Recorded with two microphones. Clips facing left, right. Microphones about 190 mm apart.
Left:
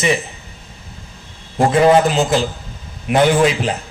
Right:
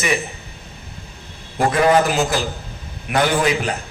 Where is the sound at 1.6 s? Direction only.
25° left (ahead or behind).